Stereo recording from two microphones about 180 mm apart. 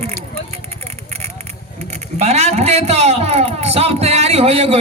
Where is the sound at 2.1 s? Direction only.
35° right (ahead or behind).